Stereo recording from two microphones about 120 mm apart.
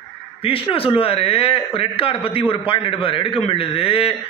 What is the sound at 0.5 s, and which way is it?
A man's voice, 50° left (ahead or behind).